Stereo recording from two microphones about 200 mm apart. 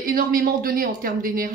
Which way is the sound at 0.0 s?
45° right (ahead or behind).